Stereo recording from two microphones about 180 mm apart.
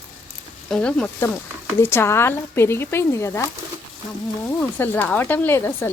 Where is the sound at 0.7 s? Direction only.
5° left (ahead or behind).